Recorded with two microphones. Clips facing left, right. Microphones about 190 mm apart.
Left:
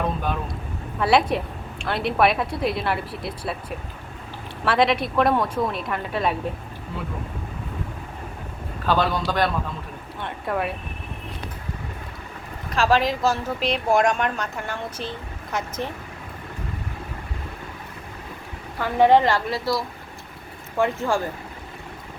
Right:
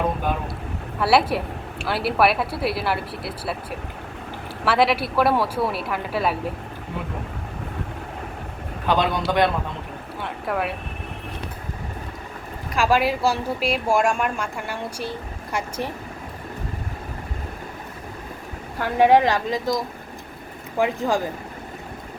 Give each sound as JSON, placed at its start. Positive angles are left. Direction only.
{"t": 0.9, "sound": "speech", "side_deg": -5}
{"t": 8.9, "sound": "a man's voice", "side_deg": -20}
{"t": 10.2, "sound": "speech", "side_deg": 0}
{"t": 12.7, "sound": "speech", "side_deg": -10}
{"t": 18.9, "sound": "speech", "side_deg": -10}